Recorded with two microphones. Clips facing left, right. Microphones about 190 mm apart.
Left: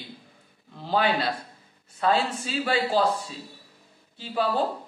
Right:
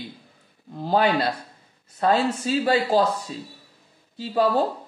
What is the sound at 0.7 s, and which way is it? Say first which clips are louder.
A man's voice: right 4 dB; 45° right (ahead or behind).